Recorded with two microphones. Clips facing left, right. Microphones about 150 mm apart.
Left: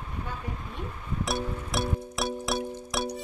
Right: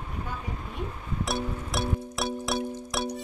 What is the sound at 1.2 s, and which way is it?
Music, centre (ahead or behind).